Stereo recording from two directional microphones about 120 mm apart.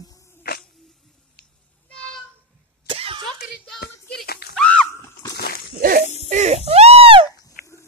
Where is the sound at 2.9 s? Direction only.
50° right (ahead or behind).